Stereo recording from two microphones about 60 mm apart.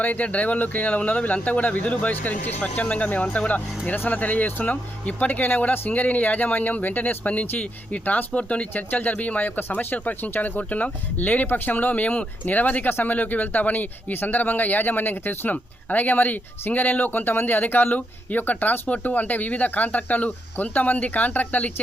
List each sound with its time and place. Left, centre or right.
0.0 s speech: left